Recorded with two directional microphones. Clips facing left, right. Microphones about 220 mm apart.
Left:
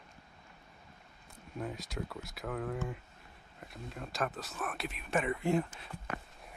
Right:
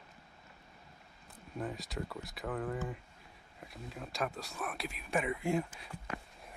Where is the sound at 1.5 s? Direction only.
Centre (ahead or behind).